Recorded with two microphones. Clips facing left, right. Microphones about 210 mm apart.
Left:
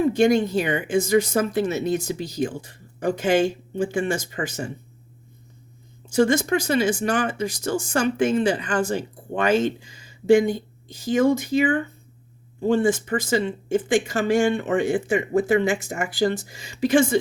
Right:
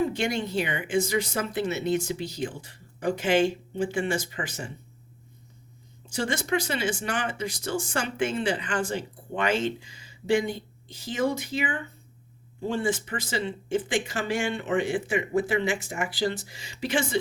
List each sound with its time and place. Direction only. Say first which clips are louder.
0.1 s speech: left 10 dB; 45° left (ahead or behind)
6.1 s speech: left 9 dB; 45° left (ahead or behind)